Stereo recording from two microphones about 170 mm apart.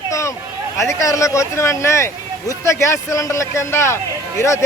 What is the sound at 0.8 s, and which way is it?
A man's voice, 20° left (ahead or behind).